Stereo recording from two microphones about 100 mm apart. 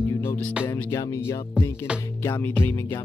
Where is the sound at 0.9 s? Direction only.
30° left (ahead or behind).